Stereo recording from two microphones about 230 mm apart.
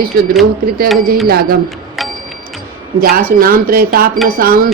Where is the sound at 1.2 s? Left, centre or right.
Right.